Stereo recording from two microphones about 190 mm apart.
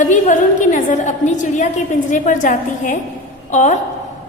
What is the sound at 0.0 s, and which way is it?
A woman's voice, 40° left (ahead or behind).